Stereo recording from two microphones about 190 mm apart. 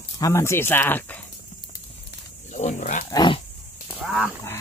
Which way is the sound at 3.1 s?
25° left (ahead or behind).